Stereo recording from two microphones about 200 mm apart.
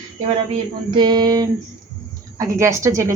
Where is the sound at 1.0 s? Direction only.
20° right (ahead or behind).